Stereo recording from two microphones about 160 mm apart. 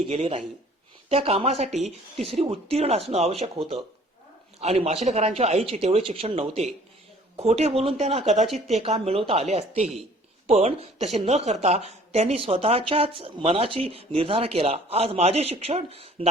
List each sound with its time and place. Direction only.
0.1 s speech: 40° right (ahead or behind)
8.4 s speech: centre (ahead or behind)
8.7 s speech: 40° right (ahead or behind)